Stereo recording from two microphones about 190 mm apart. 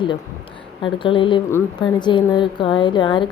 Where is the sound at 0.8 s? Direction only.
25° left (ahead or behind).